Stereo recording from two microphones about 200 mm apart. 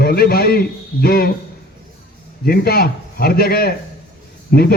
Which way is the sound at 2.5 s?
50° left (ahead or behind).